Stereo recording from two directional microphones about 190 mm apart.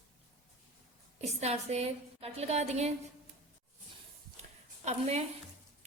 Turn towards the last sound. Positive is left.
turn(degrees=-35)  # may be behind; listen again after turning